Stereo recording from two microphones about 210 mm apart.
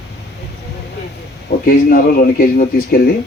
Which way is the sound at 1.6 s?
45° left (ahead or behind).